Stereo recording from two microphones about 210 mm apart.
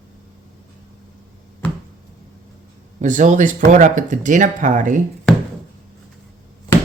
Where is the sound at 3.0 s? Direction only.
35° right (ahead or behind).